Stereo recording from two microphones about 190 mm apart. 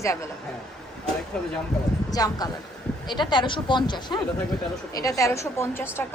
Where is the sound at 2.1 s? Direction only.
20° left (ahead or behind).